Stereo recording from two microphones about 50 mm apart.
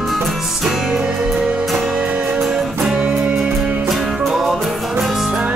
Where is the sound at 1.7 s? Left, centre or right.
Centre.